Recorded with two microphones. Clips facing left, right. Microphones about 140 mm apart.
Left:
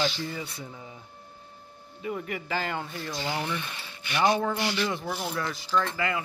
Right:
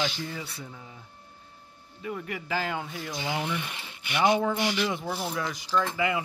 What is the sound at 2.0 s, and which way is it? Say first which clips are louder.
Speech: left 2 dB; 5° left (ahead or behind).